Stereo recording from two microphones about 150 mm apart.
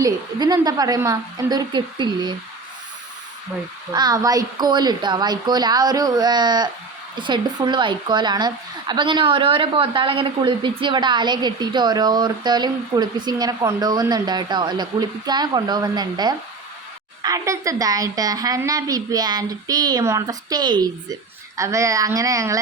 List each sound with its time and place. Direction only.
0.0 s speech: 25° right (ahead or behind)
3.9 s speech: 25° right (ahead or behind)